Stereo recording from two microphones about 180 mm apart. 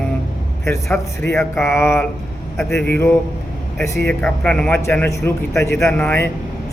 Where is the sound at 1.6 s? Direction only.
15° left (ahead or behind).